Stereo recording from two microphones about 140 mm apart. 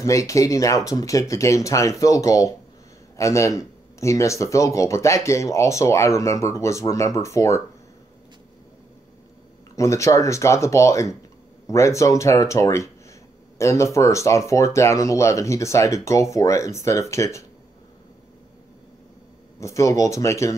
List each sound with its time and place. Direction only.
0.0 s speech: 25° left (ahead or behind)
9.8 s speech: 20° left (ahead or behind)
19.6 s speech: 20° left (ahead or behind)